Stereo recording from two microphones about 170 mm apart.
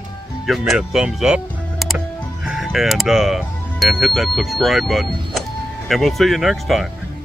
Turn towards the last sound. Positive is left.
turn(degrees=0)  # may be behind; listen again after turning